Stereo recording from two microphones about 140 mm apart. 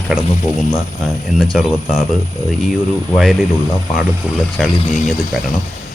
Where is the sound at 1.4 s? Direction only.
5° right (ahead or behind).